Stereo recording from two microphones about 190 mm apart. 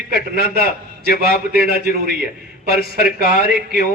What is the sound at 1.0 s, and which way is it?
Speech, 50° left (ahead or behind).